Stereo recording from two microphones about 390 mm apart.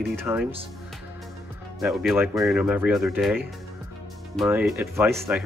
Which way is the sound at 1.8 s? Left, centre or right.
Centre.